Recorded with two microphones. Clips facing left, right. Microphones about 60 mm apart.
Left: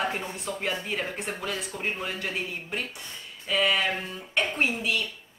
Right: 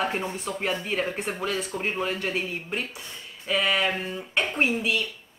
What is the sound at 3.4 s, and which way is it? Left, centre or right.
Speech, centre.